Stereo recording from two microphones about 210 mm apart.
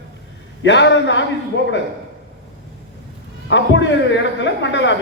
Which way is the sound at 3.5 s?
60° left (ahead or behind).